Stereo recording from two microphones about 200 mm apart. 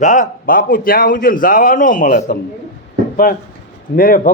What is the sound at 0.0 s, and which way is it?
Speech, 40° left (ahead or behind).